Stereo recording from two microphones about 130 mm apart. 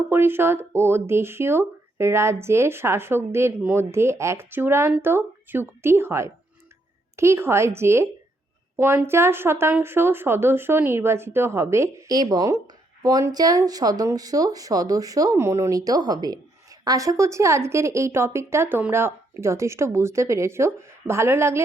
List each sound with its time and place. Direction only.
0.1 s a woman's voice: 15° right (ahead or behind)